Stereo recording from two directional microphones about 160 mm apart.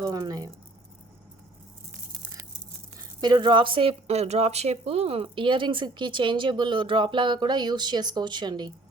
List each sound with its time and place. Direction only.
0.0 s speech: 25° right (ahead or behind)
3.2 s a woman's voice: 25° right (ahead or behind)